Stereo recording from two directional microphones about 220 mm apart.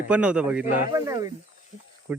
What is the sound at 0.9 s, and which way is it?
Speech, 15° right (ahead or behind).